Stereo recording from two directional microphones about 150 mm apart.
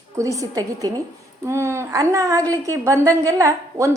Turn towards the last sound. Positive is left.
turn(degrees=-20)  # may be behind; listen again after turning